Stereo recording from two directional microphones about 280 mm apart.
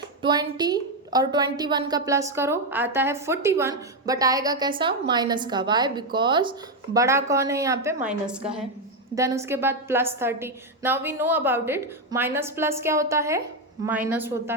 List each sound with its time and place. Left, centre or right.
0.2 s a woman's voice: centre